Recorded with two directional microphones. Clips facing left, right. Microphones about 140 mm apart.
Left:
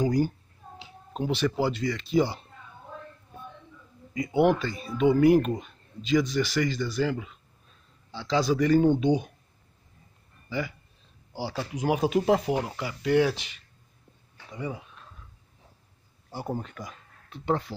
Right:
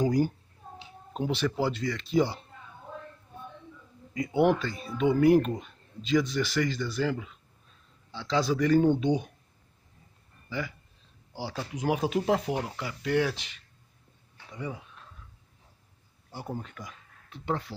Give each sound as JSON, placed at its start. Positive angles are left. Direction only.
{"t": 1.1, "sound": "speech", "side_deg": 0}
{"t": 4.1, "sound": "speech", "side_deg": 5}
{"t": 11.3, "sound": "speech", "side_deg": 10}
{"t": 16.3, "sound": "speech", "side_deg": 40}